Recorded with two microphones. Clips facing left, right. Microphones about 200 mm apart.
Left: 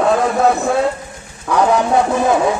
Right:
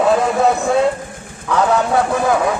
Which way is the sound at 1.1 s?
50° right (ahead or behind).